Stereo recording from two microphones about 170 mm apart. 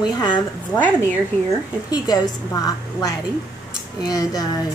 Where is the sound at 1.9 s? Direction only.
20° left (ahead or behind).